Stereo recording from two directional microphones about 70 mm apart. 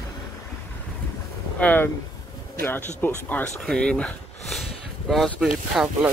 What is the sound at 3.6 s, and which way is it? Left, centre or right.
Speech, centre.